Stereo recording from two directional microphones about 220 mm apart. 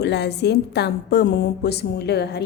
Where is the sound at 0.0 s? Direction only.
50° left (ahead or behind).